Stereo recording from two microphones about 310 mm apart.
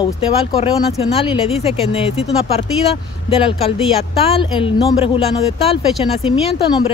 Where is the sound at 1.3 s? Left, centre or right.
Centre.